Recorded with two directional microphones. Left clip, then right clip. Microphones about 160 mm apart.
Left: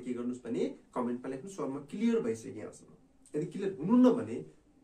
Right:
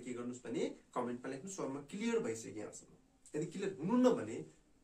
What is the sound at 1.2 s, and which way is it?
Speech, 20° left (ahead or behind).